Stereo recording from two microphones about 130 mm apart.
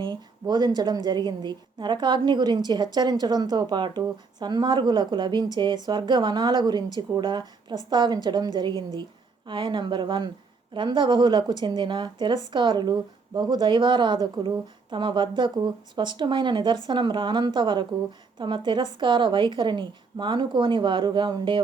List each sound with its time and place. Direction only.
0.0 s a woman's voice: 35° right (ahead or behind)